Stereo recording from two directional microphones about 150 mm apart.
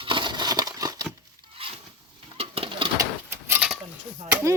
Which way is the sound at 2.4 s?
40° right (ahead or behind).